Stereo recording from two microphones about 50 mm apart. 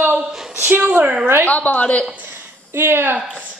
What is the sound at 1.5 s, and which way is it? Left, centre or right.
Speech, left.